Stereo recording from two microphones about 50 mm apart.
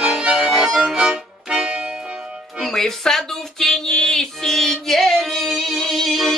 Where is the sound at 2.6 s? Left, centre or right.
Centre.